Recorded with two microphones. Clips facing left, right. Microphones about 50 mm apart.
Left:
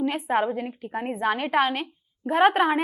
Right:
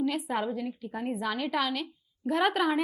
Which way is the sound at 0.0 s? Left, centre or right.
Left.